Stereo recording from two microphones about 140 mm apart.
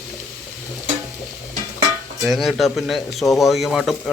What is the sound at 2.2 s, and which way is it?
Speech, centre (ahead or behind).